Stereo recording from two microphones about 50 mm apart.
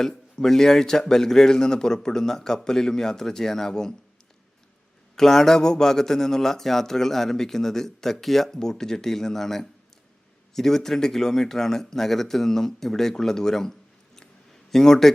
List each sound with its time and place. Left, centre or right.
0.0 s a man's voice: centre
5.1 s a man's voice: centre
14.2 s a sound: centre